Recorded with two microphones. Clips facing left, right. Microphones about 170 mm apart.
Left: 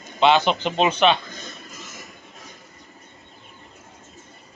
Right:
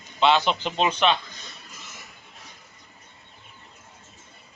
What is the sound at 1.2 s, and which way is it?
Speech, 50° left (ahead or behind).